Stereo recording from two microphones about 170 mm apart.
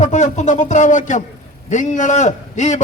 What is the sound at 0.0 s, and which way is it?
A man's voice, 45° left (ahead or behind).